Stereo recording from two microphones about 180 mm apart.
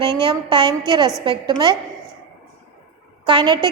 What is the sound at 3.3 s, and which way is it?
Speech, 25° right (ahead or behind).